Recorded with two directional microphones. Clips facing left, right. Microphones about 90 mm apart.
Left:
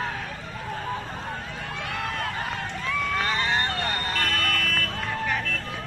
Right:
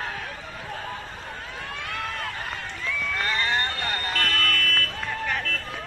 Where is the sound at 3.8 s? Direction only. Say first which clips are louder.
Left 1 dB; 25° left (ahead or behind).